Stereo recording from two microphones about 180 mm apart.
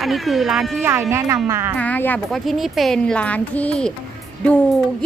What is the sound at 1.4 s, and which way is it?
Speech, 15° right (ahead or behind).